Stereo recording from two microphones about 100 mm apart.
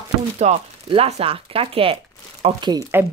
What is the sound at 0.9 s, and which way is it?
Speech, 85° right.